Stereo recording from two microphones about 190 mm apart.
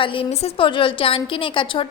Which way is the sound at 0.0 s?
30° left (ahead or behind).